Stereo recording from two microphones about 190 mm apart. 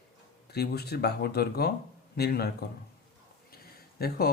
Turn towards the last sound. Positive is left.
turn(degrees=55)  # may be behind; listen again after turning